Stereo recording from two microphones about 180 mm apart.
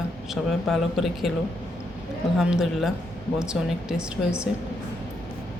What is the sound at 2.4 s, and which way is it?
Speech, 5° right (ahead or behind).